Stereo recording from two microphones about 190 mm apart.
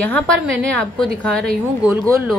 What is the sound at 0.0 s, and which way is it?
A woman's voice, 5° left (ahead or behind).